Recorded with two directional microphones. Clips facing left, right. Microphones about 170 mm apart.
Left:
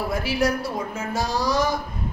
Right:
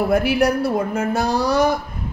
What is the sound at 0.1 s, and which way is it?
A woman's voice, 60° right (ahead or behind).